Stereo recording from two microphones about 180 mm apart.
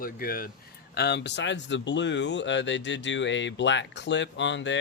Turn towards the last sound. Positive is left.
turn(degrees=85)